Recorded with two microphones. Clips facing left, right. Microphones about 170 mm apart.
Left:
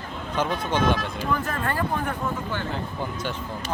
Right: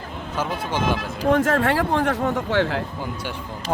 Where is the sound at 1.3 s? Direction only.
85° right.